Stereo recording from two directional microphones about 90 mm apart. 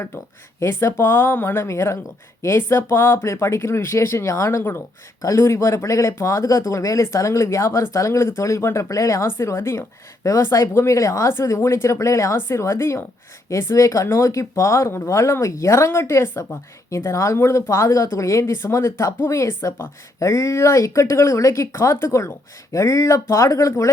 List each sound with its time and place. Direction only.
0.6 s speech: 30° left (ahead or behind)